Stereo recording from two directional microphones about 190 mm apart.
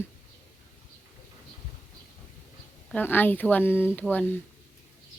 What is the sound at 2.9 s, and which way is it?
Speech, 10° left (ahead or behind).